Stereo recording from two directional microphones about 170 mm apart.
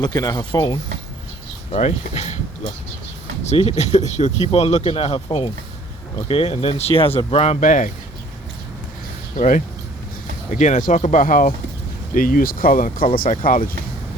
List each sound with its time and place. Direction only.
0.0 s speech: 20° left (ahead or behind)
1.7 s speech: 40° left (ahead or behind)
3.4 s speech: 40° left (ahead or behind)
9.3 s speech: 45° left (ahead or behind)